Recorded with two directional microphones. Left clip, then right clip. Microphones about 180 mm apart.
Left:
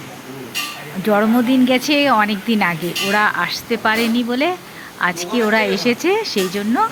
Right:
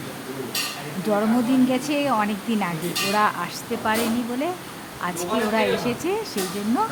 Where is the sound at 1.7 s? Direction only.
15° left (ahead or behind).